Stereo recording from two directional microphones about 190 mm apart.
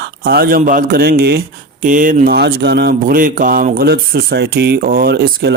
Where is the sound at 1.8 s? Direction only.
45° right (ahead or behind).